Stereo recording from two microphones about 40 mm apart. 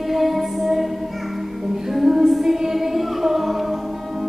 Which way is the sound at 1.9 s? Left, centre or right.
Centre.